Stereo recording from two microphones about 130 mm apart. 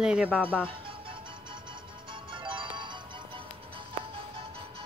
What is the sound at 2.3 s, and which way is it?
Music, 40° right (ahead or behind).